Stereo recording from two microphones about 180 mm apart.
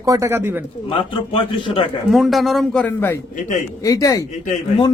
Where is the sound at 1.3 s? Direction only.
30° left (ahead or behind).